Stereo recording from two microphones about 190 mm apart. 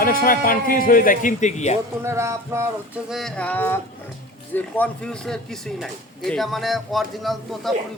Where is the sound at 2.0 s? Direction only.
15° right (ahead or behind).